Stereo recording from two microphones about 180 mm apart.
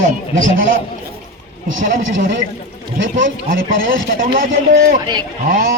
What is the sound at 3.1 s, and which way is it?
Speech, 50° right (ahead or behind).